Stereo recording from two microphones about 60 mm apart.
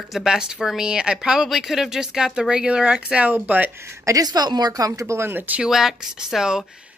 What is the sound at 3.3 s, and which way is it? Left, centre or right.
Speech, right.